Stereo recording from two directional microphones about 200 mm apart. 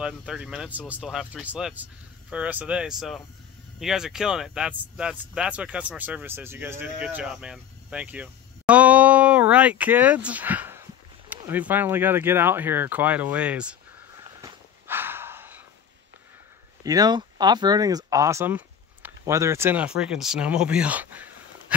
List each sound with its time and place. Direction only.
0.0 s speech: 5° right (ahead or behind)
14.4 s a sound: 15° right (ahead or behind)
16.8 s speech: 20° right (ahead or behind)